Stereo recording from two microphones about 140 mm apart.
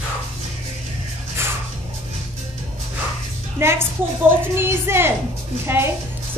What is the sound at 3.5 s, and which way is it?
A woman's voice, 15° right (ahead or behind).